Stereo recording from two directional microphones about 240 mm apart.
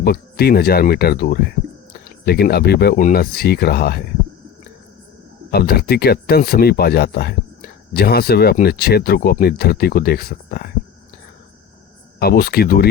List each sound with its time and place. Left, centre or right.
0.0 s speech: left
5.5 s speech: left
12.2 s speech: left